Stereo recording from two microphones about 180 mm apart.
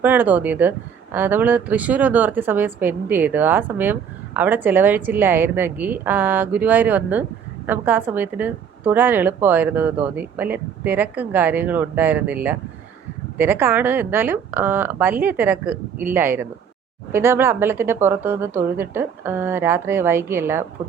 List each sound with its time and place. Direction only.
0.0 s a woman's voice: 10° right (ahead or behind)